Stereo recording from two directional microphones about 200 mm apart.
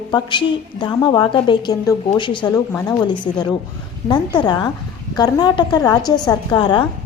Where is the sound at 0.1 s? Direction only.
25° left (ahead or behind).